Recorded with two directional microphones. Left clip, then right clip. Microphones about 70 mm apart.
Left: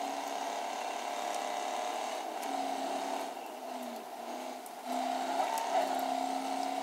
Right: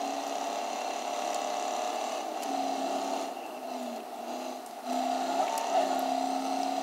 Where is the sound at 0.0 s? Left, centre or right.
Right.